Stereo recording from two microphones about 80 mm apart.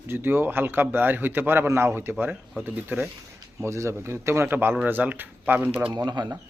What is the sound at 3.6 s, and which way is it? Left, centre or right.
A man's voice, right.